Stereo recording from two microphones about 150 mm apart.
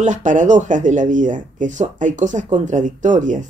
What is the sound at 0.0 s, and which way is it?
Speech, 55° right (ahead or behind).